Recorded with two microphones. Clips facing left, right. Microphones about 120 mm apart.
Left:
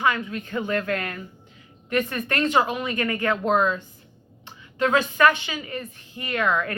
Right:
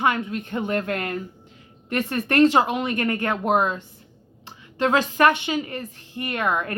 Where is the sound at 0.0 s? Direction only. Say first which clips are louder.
Right 1 dB; 25° right (ahead or behind).